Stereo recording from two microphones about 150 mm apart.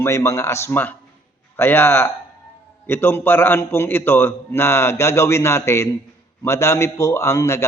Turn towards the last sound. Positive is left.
turn(degrees=20)  # may be behind; listen again after turning